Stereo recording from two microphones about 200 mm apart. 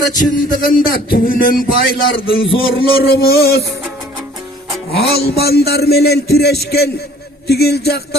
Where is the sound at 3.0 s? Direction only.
50° left (ahead or behind).